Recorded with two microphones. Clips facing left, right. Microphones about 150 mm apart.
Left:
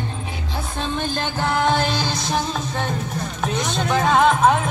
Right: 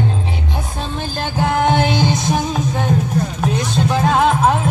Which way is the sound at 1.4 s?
15° right (ahead or behind).